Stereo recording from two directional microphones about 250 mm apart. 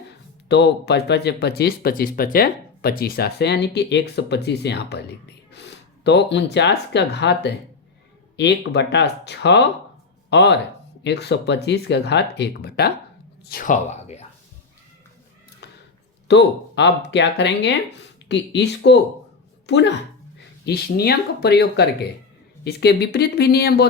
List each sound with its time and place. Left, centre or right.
0.4 s speech: left
16.3 s speech: left